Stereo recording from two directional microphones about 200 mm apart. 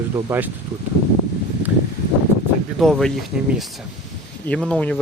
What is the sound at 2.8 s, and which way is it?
Speech, centre (ahead or behind).